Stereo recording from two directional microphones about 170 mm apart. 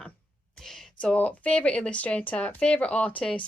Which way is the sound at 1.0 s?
5° left (ahead or behind).